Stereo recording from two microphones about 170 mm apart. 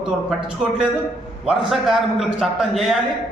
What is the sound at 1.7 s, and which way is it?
A man's voice, centre (ahead or behind).